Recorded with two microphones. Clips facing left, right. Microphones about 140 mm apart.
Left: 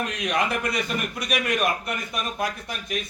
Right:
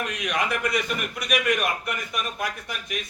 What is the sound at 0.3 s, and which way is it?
A man's voice, 30° left (ahead or behind).